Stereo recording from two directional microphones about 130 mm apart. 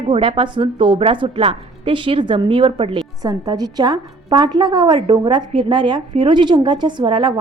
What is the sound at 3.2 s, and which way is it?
A woman's voice, 30° right (ahead or behind).